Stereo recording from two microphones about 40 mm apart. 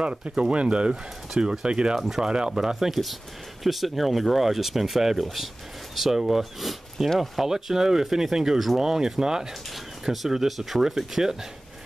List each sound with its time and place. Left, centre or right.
0.0 s speech: right
2.0 s speech: centre
2.2 s speech: right